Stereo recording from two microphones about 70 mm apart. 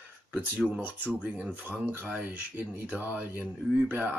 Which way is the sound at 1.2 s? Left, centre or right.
Centre.